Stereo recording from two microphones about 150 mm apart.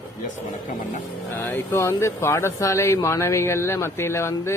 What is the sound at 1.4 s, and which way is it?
Speech, 15° left (ahead or behind).